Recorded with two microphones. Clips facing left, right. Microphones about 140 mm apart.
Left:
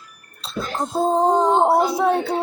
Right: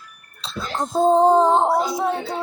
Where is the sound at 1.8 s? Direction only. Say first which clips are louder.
Left 4 dB; 60° left (ahead or behind).